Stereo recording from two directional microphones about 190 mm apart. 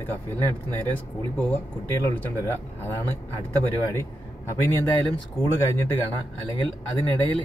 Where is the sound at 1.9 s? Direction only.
10° left (ahead or behind).